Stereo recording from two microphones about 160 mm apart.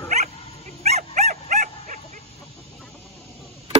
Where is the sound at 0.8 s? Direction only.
45° right (ahead or behind).